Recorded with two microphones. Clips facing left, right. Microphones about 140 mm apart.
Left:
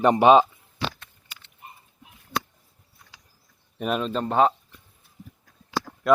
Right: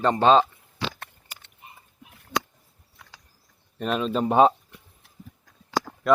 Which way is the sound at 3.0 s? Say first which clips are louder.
Right 5 dB; 75° right (ahead or behind).